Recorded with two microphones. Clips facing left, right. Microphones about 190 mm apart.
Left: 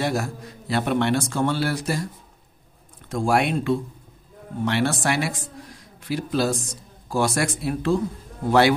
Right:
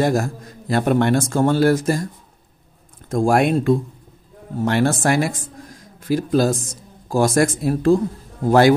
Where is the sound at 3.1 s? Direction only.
45° right (ahead or behind).